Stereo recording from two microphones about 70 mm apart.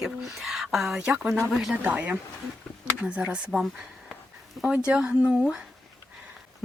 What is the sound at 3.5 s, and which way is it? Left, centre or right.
Speech, centre.